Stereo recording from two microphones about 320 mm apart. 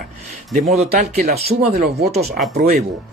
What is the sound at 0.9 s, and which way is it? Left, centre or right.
Speech, right.